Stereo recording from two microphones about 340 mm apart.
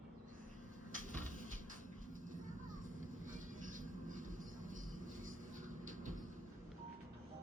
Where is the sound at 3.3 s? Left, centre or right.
Right.